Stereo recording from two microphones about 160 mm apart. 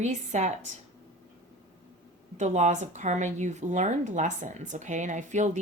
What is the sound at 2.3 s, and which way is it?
A woman's voice, 45° right (ahead or behind).